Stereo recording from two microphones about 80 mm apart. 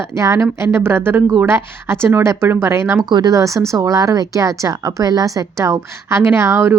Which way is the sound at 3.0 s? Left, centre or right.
Right.